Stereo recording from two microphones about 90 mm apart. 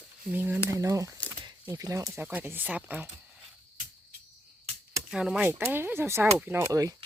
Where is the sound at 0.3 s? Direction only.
25° right (ahead or behind).